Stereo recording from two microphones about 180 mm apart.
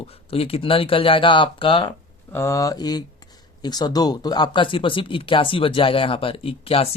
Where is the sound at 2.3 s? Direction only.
15° left (ahead or behind).